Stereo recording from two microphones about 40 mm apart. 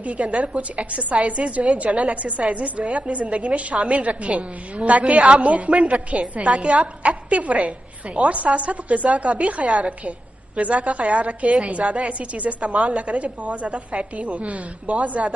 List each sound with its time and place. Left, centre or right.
0.0 s a woman's voice: right
3.7 s a woman's voice: right
4.0 s a woman's voice: right